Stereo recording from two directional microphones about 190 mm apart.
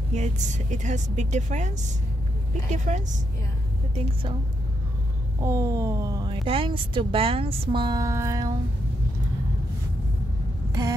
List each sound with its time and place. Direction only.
0.1 s a woman's voice: 40° right (ahead or behind)
5.4 s speech: 15° right (ahead or behind)